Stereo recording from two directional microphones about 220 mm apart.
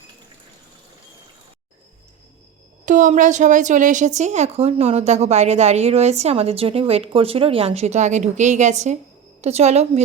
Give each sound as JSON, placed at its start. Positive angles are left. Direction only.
{"t": 2.8, "sound": "a woman's voice", "side_deg": -35}